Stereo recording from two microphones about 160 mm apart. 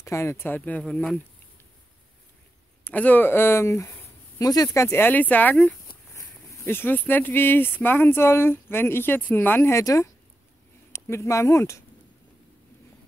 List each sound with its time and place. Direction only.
0.0 s speech: 15° left (ahead or behind)
2.8 s speech: 10° left (ahead or behind)